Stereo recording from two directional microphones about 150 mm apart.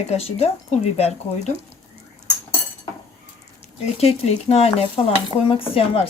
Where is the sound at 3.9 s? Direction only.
45° left (ahead or behind).